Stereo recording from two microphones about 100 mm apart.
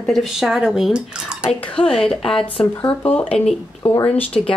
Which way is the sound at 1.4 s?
10° left (ahead or behind).